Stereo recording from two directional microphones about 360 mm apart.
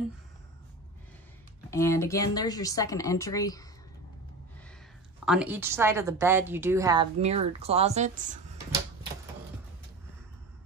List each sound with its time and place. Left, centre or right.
1.7 s speech: centre
5.2 s a woman's voice: centre